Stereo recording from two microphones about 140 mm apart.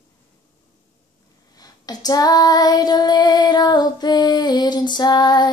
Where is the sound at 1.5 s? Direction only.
30° left (ahead or behind).